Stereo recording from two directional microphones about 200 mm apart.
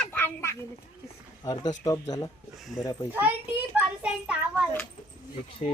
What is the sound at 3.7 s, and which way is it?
Speech, 5° right (ahead or behind).